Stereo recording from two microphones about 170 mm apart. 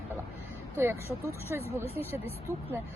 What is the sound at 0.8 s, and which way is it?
Speech, 15° right (ahead or behind).